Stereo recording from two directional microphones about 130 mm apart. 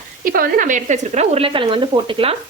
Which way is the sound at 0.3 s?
90° right.